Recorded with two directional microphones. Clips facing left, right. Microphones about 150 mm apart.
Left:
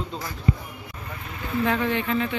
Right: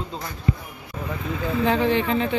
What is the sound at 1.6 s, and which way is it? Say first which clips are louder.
Speech: right 4 dB; 30° right (ahead or behind).